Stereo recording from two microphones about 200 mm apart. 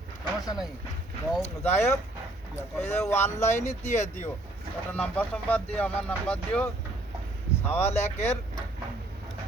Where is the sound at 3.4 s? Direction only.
35° left (ahead or behind).